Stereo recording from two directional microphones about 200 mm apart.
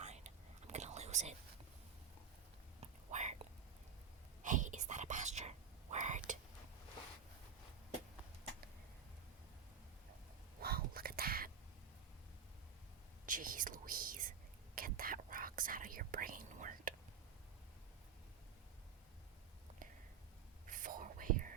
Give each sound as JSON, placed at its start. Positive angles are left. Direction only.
{"t": 0.0, "sound": "whispering", "side_deg": -35}
{"t": 2.8, "sound": "whispering", "side_deg": -35}
{"t": 4.4, "sound": "whispering", "side_deg": -40}
{"t": 10.6, "sound": "whispering", "side_deg": -50}
{"t": 13.2, "sound": "whispering", "side_deg": -40}
{"t": 20.7, "sound": "whispering", "side_deg": -40}